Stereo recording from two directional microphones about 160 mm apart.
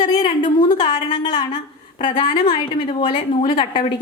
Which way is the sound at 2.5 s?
30° left (ahead or behind).